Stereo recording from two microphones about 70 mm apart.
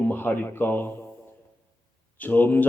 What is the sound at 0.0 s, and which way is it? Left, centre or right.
A man's voice, left.